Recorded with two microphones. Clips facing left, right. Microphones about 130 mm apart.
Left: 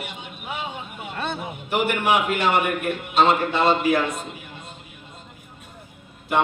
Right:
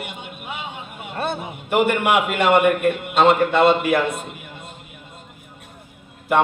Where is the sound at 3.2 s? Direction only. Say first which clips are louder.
Right 6 dB; 55° right (ahead or behind).